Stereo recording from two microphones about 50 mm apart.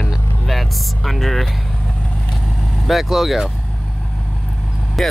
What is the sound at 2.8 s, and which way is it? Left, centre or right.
Speech, centre.